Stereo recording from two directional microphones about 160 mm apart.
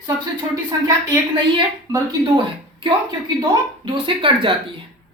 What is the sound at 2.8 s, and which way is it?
Speech, 30° right (ahead or behind).